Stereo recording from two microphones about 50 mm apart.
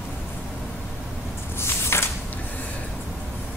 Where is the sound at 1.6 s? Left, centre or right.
Left.